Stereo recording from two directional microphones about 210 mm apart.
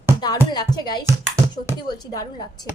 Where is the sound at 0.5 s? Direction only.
20° left (ahead or behind).